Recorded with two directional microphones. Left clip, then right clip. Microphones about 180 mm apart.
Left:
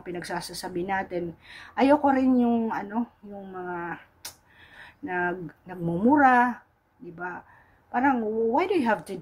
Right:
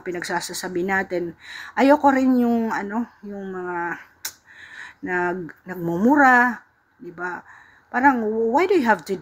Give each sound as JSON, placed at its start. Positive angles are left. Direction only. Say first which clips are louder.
{"t": 0.0, "sound": "speech", "louder": "right 7 dB", "side_deg": -20}